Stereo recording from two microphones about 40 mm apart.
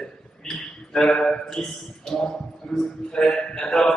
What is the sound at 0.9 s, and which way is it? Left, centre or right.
Speech, centre.